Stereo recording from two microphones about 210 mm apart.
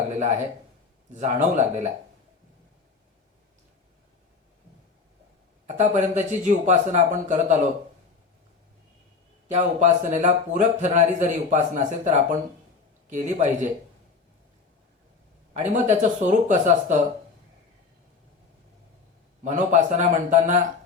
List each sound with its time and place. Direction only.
1.1 s speech: 35° right (ahead or behind)
5.6 s speech: 35° right (ahead or behind)
9.5 s speech: 35° right (ahead or behind)
15.7 s speech: 35° right (ahead or behind)
19.5 s speech: 35° right (ahead or behind)